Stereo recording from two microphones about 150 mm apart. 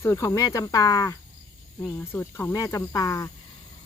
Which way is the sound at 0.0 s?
20° left (ahead or behind).